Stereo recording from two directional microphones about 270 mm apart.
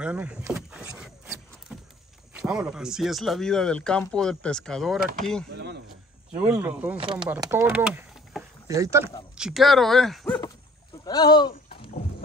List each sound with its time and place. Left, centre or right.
0.0 s speech: centre
6.4 s speech: centre
7.0 s speech: centre
8.6 s speech: centre
11.1 s speech: centre